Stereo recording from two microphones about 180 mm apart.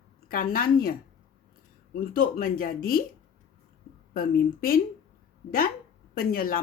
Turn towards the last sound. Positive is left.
turn(degrees=55)  # may be behind; listen again after turning